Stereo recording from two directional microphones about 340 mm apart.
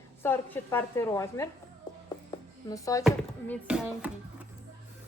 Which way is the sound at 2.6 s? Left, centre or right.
Centre.